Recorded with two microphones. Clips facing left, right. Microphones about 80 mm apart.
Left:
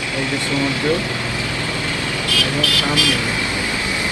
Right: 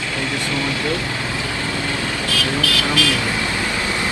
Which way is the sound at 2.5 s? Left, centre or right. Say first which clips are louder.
Even; left.